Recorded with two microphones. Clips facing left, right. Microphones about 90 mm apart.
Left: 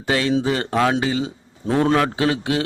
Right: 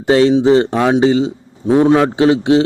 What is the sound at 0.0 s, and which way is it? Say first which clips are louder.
A man's voice: right 9 dB; 25° right (ahead or behind).